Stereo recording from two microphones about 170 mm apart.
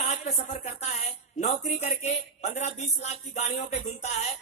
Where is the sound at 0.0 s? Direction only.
45° left (ahead or behind).